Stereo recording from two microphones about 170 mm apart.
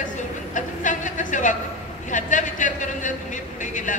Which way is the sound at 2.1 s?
50° left (ahead or behind).